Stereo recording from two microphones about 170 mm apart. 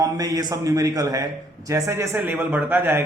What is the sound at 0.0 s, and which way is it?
A man's voice, 20° right (ahead or behind).